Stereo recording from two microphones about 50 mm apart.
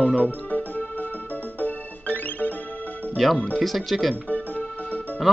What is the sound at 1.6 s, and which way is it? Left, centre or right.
Music, left.